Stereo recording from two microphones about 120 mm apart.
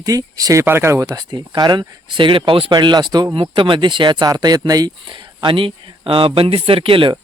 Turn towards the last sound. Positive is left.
turn(degrees=-45)  # may be behind; listen again after turning